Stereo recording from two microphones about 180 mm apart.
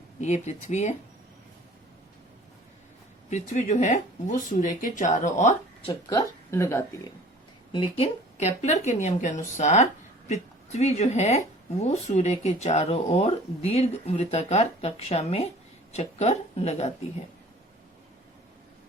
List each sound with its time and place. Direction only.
0.2 s speech: 40° left (ahead or behind)
3.2 s speech: 40° left (ahead or behind)
6.1 s speech: 15° left (ahead or behind)
7.7 s speech: 30° left (ahead or behind)